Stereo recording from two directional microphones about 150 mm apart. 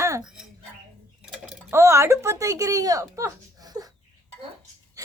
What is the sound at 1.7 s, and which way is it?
Speech, 20° right (ahead or behind).